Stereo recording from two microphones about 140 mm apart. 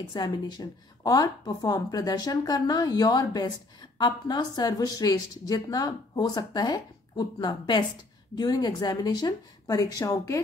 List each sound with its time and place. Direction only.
0.1 s a woman's voice: 30° left (ahead or behind)